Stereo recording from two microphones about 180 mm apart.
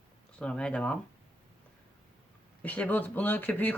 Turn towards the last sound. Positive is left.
turn(degrees=10)  # may be behind; listen again after turning